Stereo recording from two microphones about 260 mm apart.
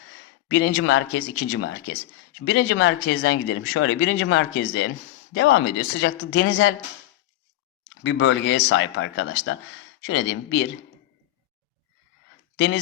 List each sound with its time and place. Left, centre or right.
0.5 s speech: left
8.0 s speech: left
12.5 s speech: left